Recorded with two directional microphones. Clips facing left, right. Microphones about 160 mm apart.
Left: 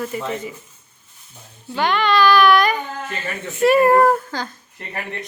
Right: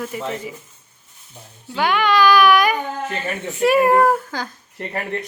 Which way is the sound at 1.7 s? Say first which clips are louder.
Even; 10° right (ahead or behind).